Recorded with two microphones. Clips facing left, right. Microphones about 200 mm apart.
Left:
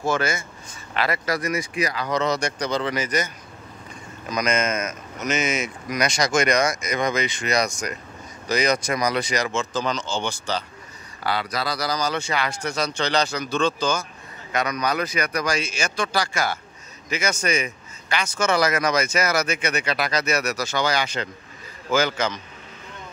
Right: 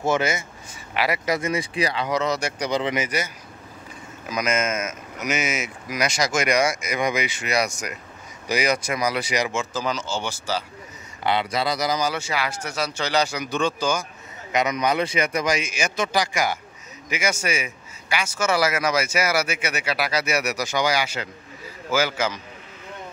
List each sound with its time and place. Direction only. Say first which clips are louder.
0.0 s speech: right 1 dB; 20° right (ahead or behind)
2.0 s a man's voice: left 1 dB; 5° right (ahead or behind)
4.3 s a man's voice: left 1 dB; 5° right (ahead or behind)
11.2 s speech: right 3 dB; 20° right (ahead or behind)
12.1 s a man's voice: left 1 dB; 5° right (ahead or behind)